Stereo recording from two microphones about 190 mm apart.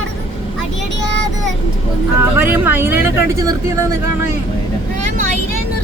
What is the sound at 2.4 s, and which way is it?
Speech, 10° right (ahead or behind).